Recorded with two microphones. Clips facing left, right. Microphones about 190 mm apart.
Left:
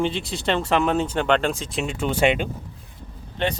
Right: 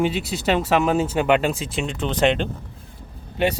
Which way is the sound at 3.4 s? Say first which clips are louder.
Right 3 dB; 10° right (ahead or behind).